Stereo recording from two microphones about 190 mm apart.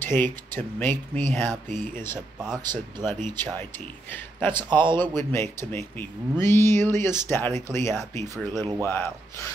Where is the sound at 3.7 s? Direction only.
10° left (ahead or behind).